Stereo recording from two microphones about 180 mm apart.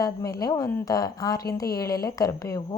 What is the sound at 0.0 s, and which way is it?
Speech, 20° left (ahead or behind).